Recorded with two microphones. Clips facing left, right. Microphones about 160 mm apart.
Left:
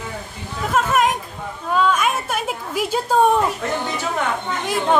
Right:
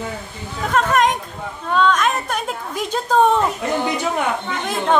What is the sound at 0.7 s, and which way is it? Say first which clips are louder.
A woman's voice: right 1 dB; 5° left (ahead or behind).